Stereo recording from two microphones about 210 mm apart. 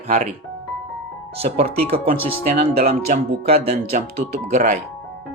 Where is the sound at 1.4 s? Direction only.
40° right (ahead or behind).